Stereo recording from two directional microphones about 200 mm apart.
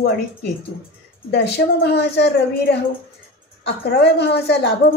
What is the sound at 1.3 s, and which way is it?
A woman's voice, 55° left (ahead or behind).